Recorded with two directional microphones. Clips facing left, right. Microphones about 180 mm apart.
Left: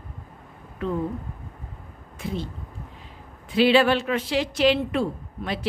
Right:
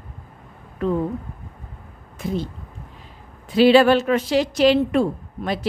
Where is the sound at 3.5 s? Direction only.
40° right (ahead or behind).